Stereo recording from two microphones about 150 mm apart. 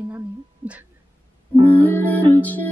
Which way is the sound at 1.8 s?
10° left (ahead or behind).